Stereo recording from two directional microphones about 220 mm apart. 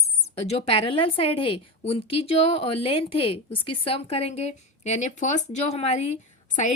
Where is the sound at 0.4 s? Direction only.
25° left (ahead or behind).